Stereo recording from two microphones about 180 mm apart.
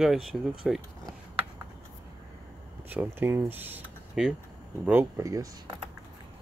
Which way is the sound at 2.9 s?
10° right (ahead or behind).